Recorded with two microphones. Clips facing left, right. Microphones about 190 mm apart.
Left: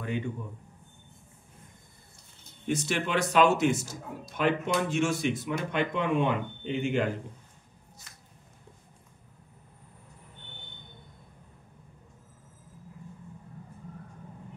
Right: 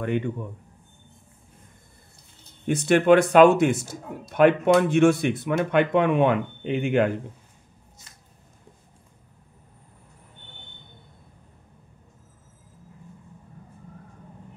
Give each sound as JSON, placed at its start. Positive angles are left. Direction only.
{"t": 2.6, "sound": "a man's voice", "side_deg": -55}